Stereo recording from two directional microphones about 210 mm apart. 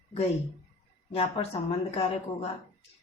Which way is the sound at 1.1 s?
25° left (ahead or behind).